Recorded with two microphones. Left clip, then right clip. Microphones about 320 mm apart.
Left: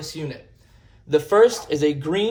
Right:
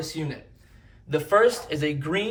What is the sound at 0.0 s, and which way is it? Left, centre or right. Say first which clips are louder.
Speech: even; centre.